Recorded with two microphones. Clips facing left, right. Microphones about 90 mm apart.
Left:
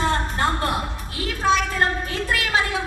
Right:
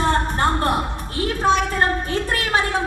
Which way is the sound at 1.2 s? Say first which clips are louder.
Right 2 dB; 40° right (ahead or behind).